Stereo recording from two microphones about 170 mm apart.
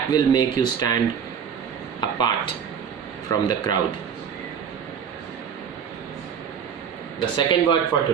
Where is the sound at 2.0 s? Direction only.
25° left (ahead or behind).